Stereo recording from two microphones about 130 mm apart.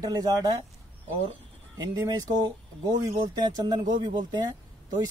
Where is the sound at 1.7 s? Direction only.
30° right (ahead or behind).